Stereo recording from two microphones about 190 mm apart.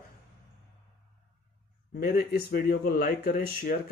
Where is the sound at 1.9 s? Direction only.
50° left (ahead or behind).